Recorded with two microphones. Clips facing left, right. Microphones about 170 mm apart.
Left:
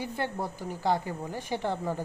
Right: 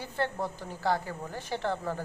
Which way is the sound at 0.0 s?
10° left (ahead or behind).